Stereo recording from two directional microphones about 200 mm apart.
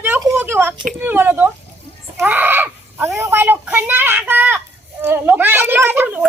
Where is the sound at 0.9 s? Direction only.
10° right (ahead or behind).